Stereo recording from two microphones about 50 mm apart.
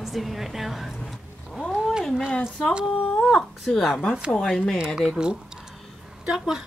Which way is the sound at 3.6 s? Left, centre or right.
Centre.